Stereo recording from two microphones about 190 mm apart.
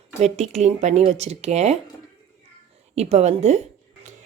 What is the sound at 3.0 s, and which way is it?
Speech, 35° right (ahead or behind).